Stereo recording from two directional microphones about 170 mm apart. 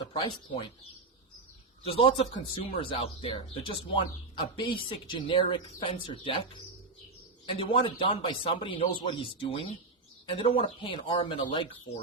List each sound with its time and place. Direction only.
0.1 s speech: 30° left (ahead or behind)
1.9 s speech: 30° left (ahead or behind)
7.4 s speech: 30° left (ahead or behind)